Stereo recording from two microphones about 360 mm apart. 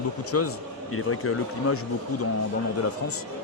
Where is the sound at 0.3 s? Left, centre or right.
Left.